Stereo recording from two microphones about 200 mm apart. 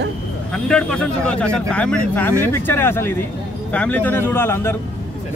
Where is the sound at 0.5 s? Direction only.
5° left (ahead or behind).